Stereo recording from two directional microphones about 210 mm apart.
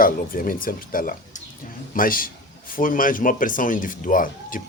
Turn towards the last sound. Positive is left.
turn(degrees=40)  # may be behind; listen again after turning